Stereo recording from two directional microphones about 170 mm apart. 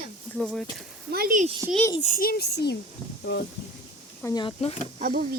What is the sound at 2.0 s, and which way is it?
Speech, 55° left (ahead or behind).